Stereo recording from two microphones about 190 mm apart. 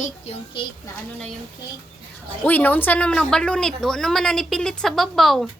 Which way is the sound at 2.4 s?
10° left (ahead or behind).